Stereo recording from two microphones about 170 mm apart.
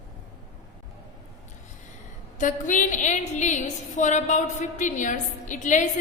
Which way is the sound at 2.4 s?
50° left (ahead or behind).